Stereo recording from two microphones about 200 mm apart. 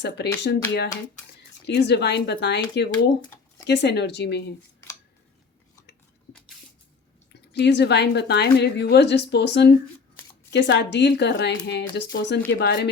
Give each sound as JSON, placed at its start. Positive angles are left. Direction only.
{"t": 0.4, "sound": "a woman's voice", "side_deg": 55}
{"t": 7.5, "sound": "a woman's voice", "side_deg": 60}